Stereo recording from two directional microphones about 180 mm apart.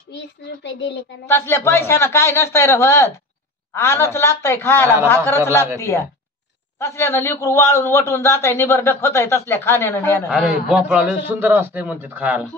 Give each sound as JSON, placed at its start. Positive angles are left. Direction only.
{"t": 0.7, "sound": "speech", "side_deg": 75}
{"t": 1.2, "sound": "a man's voice", "side_deg": 15}
{"t": 10.3, "sound": "a man's voice", "side_deg": -5}